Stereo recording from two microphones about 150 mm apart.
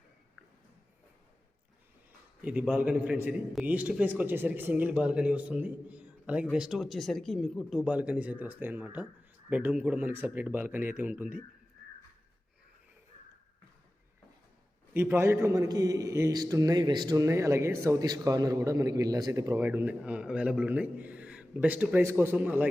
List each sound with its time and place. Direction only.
2.4 s a man's voice: 10° right (ahead or behind)
14.9 s a man's voice: 15° right (ahead or behind)
19.6 s a man's voice: 10° right (ahead or behind)